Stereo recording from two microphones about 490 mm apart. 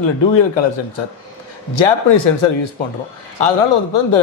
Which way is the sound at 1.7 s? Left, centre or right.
Left.